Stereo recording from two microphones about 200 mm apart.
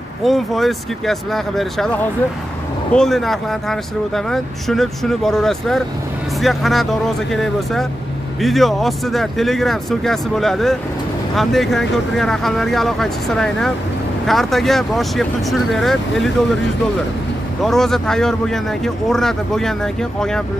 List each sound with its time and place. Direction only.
0.2 s speech: centre (ahead or behind)
17.6 s speech: centre (ahead or behind)